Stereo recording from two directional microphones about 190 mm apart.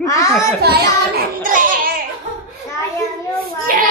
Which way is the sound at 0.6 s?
55° right (ahead or behind).